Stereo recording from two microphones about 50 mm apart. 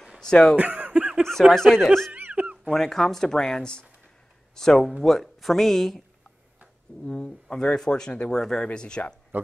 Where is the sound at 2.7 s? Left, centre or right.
Centre.